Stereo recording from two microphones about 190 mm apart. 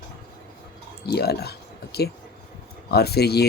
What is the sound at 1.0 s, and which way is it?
Speech, 60° left (ahead or behind).